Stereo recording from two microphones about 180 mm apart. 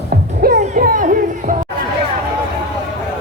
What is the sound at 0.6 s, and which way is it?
Music, 50° right (ahead or behind).